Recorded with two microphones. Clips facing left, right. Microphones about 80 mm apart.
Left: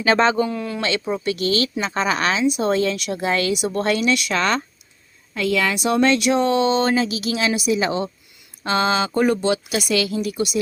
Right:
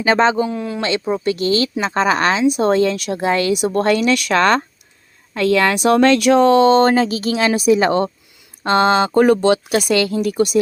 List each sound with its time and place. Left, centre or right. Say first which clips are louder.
0.0 s speech: right 2 dB; right
0.8 s speech: right 4 dB; right
9.7 s speech: right 5 dB; right